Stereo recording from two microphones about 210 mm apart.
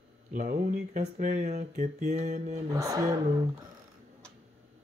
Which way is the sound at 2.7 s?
15° right (ahead or behind).